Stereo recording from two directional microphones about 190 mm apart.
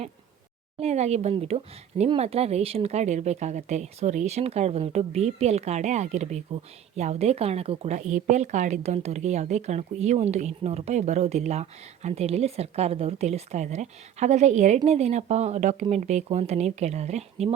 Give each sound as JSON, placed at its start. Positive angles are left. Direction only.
{"t": 0.8, "sound": "speech", "side_deg": -35}